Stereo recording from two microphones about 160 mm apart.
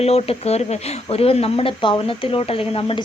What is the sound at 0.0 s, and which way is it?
Speech, 40° left (ahead or behind).